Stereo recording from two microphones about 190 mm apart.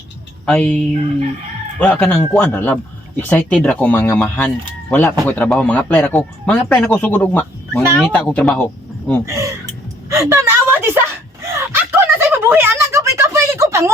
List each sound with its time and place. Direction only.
0.4 s a man's voice: 5° left (ahead or behind)
1.8 s a man's voice: 5° left (ahead or behind)
9.2 s speech: 15° right (ahead or behind)
10.1 s whimper: 15° right (ahead or behind)
11.4 s a sound: 10° right (ahead or behind)